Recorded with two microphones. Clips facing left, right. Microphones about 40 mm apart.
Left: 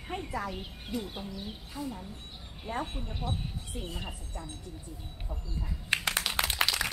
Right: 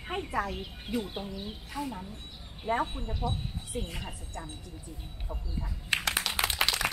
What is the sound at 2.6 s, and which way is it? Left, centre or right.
Speech, centre.